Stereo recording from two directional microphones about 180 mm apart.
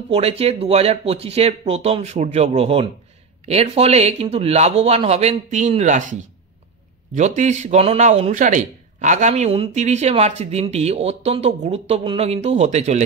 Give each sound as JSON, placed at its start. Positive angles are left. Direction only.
{"t": 0.1, "sound": "speech", "side_deg": -35}
{"t": 7.2, "sound": "speech", "side_deg": -40}